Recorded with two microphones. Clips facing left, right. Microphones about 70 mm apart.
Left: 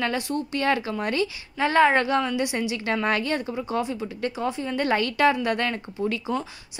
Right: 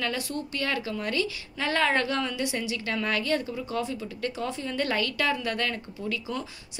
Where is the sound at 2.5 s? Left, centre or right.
Left.